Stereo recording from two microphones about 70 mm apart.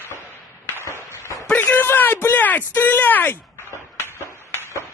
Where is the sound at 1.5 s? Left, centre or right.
Left.